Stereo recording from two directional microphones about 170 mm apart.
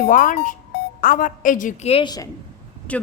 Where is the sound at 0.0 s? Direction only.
50° left (ahead or behind).